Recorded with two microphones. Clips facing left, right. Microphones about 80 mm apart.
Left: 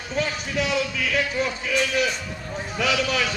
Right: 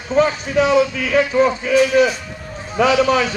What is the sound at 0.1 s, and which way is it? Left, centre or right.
A man's voice, right.